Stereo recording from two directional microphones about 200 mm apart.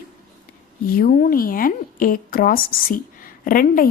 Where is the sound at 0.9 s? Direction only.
45° left (ahead or behind).